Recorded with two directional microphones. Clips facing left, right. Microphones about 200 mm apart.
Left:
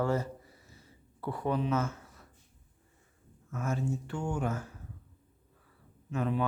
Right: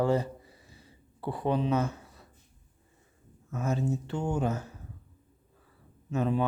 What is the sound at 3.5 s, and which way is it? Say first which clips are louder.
Speech: right 3 dB; 20° right (ahead or behind).